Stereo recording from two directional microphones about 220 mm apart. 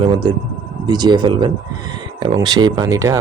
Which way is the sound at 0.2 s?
20° right (ahead or behind).